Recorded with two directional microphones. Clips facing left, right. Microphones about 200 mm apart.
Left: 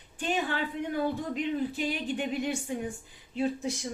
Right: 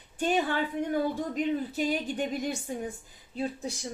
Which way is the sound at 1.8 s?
40° right (ahead or behind).